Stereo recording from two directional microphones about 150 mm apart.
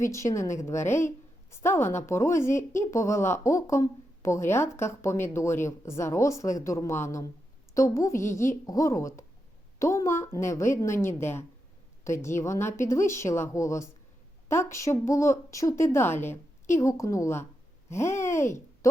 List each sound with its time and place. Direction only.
0.0 s a woman's voice: 20° left (ahead or behind)